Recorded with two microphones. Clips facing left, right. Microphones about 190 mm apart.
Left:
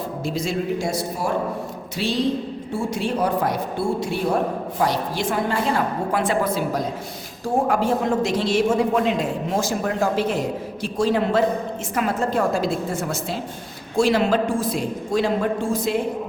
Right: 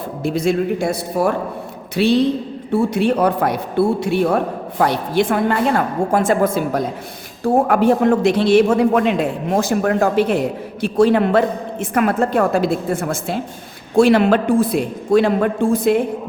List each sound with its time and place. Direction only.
0.2 s a man's voice: 55° right (ahead or behind)
7.4 s a man's voice: 60° right (ahead or behind)